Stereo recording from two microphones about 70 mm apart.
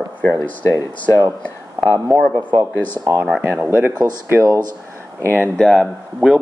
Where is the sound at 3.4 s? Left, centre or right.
Right.